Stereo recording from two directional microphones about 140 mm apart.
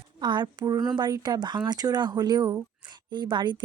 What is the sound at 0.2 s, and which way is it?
Speech, 30° right (ahead or behind).